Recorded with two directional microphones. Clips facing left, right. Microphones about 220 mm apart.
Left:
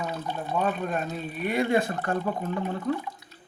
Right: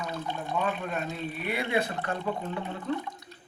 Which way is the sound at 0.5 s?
45° left (ahead or behind).